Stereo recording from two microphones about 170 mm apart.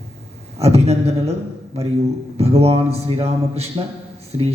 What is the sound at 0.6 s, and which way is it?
Speech, 40° right (ahead or behind).